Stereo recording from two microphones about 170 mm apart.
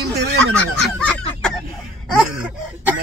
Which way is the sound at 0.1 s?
70° right (ahead or behind).